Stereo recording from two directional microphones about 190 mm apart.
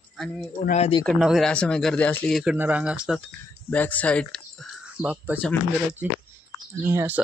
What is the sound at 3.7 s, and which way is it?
Speech, 10° left (ahead or behind).